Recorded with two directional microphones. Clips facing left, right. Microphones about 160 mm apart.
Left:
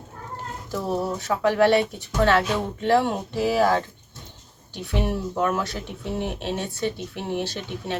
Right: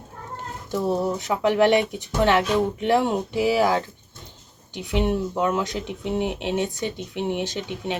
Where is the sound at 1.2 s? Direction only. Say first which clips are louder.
Left 1 dB; 20° right (ahead or behind).